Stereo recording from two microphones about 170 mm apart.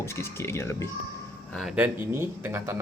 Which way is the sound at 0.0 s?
15° left (ahead or behind).